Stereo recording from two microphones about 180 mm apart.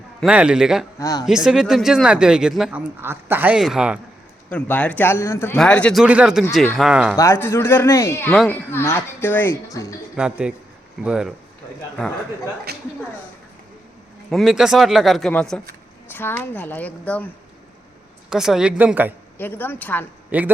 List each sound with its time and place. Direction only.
0.2 s speech: 5° right (ahead or behind)
0.9 s speech: 20° left (ahead or behind)
1.3 s speech: 5° right (ahead or behind)
4.4 s speech: 10° left (ahead or behind)
7.2 s speech: 15° left (ahead or behind)
10.2 s speech: 5° right (ahead or behind)
12.7 s speech: 60° right (ahead or behind)
14.3 s speech: centre (ahead or behind)
18.3 s speech: 5° right (ahead or behind)
19.4 s speech: 10° left (ahead or behind)
20.3 s speech: 10° right (ahead or behind)